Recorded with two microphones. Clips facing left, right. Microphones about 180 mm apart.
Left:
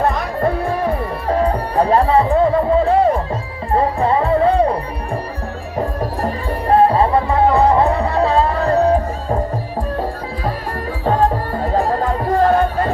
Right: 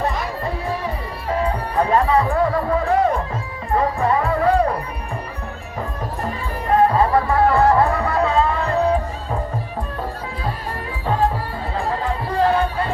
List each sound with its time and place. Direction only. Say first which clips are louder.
1.3 s music: left 4 dB; 40° left (ahead or behind)
6.7 s music: left 3 dB; 30° left (ahead or behind)
11.5 s music: left 7 dB; 45° left (ahead or behind)